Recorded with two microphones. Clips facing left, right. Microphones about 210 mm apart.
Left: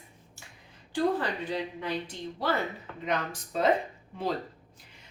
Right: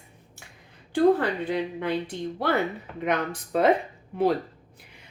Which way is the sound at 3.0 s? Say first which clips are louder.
Right 5 dB; 60° right (ahead or behind).